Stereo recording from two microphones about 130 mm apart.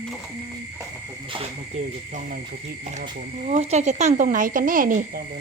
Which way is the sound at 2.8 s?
60° right (ahead or behind).